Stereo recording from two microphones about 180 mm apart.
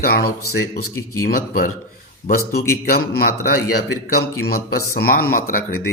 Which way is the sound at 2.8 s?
55° left (ahead or behind).